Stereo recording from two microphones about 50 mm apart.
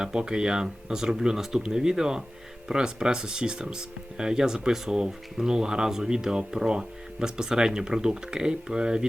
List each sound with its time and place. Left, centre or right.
0.0 s speech: centre